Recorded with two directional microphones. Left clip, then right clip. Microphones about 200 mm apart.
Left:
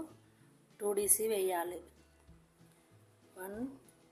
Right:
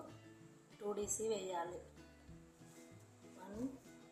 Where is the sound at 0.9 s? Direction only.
60° left (ahead or behind).